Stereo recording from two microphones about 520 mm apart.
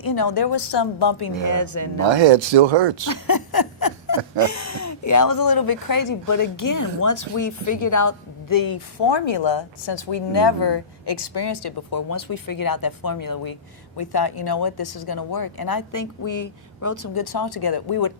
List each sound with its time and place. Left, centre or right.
0.0 s a woman's voice: left
2.0 s speech: right
3.1 s a sound: left
4.4 s speech: left